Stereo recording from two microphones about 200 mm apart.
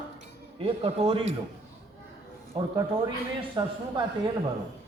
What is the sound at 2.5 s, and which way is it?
A man's voice, 25° right (ahead or behind).